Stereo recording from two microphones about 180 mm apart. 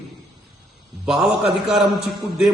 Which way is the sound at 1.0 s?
5° right (ahead or behind).